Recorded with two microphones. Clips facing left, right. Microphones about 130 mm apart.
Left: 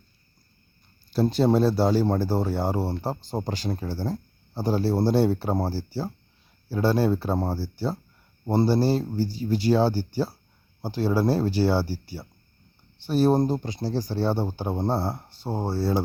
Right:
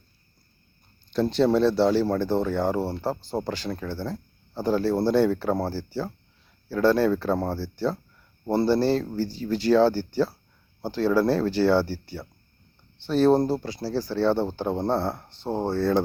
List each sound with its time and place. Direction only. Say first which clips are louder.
1.3 s speech: right 1 dB; 10° left (ahead or behind)
1.5 s speech: right 1 dB; 40° left (ahead or behind)
2.8 s speech: right 1 dB; 15° left (ahead or behind)
3.8 s speech: left 1 dB; 40° left (ahead or behind)
6.8 s speech: right 2 dB; 10° left (ahead or behind)